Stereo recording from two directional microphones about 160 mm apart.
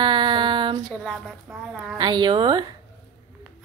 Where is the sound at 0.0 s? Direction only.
30° right (ahead or behind).